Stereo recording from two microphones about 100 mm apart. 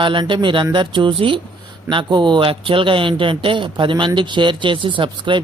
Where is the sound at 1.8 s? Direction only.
50° right (ahead or behind).